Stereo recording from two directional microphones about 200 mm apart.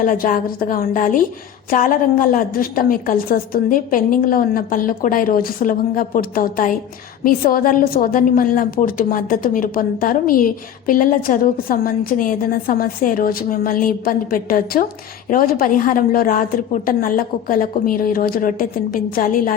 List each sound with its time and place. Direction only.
0.0 s a woman's voice: 45° left (ahead or behind)